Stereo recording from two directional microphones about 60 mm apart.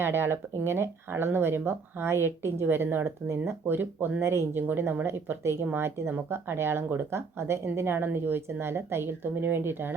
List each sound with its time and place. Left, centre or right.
0.0 s speech: right
4.2 s speech: right
4.5 s speech: right